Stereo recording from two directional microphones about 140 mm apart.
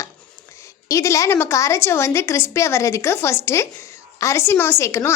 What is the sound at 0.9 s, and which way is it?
A woman's voice, 20° left (ahead or behind).